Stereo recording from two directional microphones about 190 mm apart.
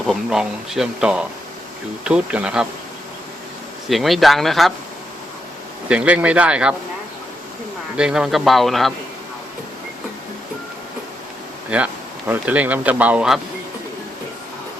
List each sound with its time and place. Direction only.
0.0 s speech: centre (ahead or behind)
3.8 s speech: centre (ahead or behind)
5.9 s speech: 5° right (ahead or behind)
7.9 s speech: 5° right (ahead or behind)
11.7 s speech: 5° right (ahead or behind)